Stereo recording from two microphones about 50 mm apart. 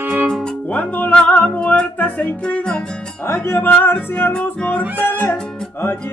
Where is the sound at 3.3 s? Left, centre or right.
Left.